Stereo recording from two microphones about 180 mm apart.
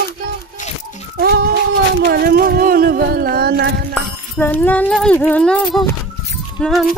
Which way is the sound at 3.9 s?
10° left (ahead or behind).